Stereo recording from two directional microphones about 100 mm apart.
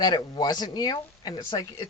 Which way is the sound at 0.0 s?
40° left (ahead or behind).